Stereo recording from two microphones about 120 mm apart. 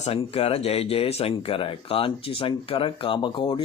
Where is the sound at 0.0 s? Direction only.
55° left (ahead or behind).